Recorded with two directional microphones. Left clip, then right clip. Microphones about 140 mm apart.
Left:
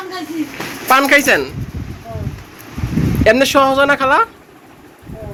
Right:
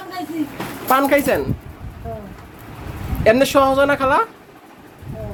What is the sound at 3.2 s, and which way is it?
A man's voice, 5° right (ahead or behind).